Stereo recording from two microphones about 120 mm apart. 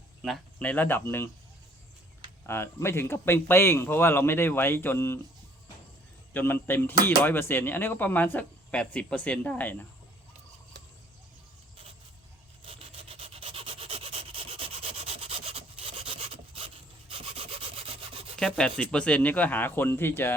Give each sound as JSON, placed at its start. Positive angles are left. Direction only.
{"t": 0.6, "sound": "speech", "side_deg": 15}
{"t": 2.5, "sound": "speech", "side_deg": 20}
{"t": 6.3, "sound": "speech", "side_deg": 20}
{"t": 12.6, "sound": "rub", "side_deg": -50}
{"t": 18.3, "sound": "rub", "side_deg": 5}
{"t": 18.8, "sound": "speech", "side_deg": 10}